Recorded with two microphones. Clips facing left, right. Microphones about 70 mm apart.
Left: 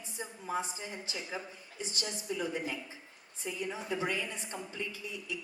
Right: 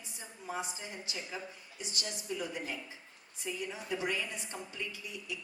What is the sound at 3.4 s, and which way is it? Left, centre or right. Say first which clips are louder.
A woman's voice: left 2 dB; left.